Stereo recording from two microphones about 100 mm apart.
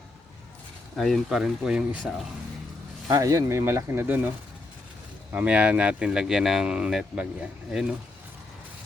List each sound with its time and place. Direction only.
0.9 s speech: centre (ahead or behind)
3.1 s speech: 35° right (ahead or behind)
5.3 s speech: 15° right (ahead or behind)